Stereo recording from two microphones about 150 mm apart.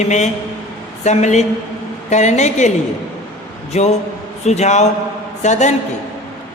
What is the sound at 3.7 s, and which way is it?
A man's voice, 50° left (ahead or behind).